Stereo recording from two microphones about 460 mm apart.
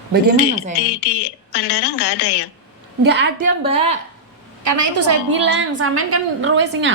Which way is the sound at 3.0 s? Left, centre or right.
Right.